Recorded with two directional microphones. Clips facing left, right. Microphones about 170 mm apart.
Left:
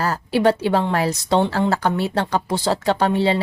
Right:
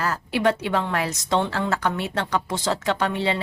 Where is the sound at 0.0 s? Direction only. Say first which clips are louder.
Left 4 dB; 35° left (ahead or behind).